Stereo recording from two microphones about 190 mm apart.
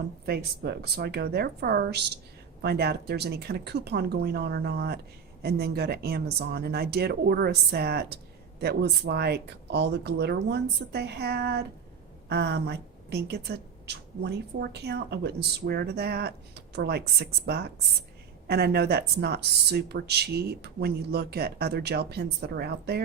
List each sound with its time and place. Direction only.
0.3 s a woman's voice: 55° right (ahead or behind)